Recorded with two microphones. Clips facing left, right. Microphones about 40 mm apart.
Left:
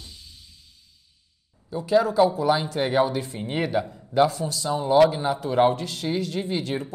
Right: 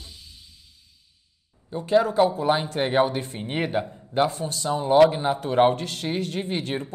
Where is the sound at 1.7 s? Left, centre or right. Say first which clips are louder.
Even; right.